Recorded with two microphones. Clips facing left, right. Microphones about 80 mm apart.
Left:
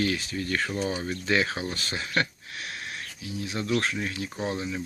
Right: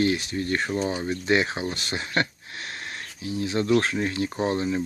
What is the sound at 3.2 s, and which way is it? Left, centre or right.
Speech, right.